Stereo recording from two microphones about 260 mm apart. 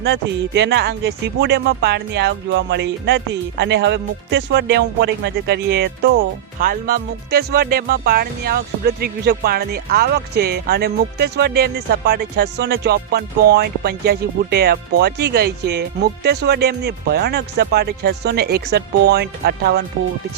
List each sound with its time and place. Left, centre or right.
0.0 s speech: right